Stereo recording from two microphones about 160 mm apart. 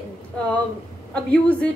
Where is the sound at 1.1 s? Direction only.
5° left (ahead or behind).